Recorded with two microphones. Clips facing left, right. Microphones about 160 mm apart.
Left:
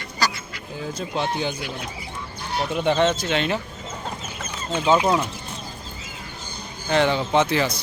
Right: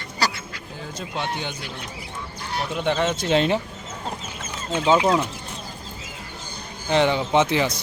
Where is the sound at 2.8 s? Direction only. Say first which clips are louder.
Left 3 dB; centre (ahead or behind).